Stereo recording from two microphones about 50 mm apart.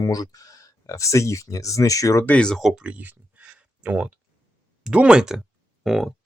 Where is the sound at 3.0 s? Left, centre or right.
Right.